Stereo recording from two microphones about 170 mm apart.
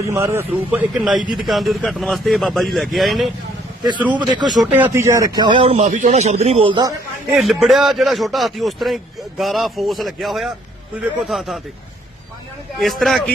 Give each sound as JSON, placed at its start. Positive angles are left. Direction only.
{"t": 0.0, "sound": "a man's voice", "side_deg": -15}
{"t": 4.1, "sound": "speech", "side_deg": -25}
{"t": 4.6, "sound": "speech", "side_deg": -10}
{"t": 7.3, "sound": "speech", "side_deg": 0}
{"t": 12.8, "sound": "speech", "side_deg": 0}